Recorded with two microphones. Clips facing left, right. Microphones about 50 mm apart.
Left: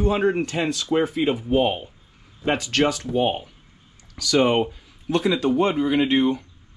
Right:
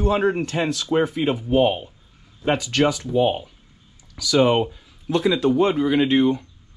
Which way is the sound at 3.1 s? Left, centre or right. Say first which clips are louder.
Right 2 dB; left.